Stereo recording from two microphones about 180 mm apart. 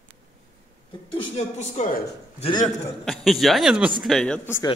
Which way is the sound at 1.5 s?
40° left (ahead or behind).